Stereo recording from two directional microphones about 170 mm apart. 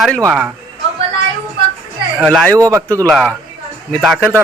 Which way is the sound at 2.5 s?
20° right (ahead or behind).